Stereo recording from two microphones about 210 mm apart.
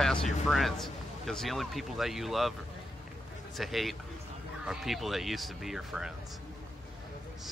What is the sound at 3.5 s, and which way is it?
Speech, centre (ahead or behind).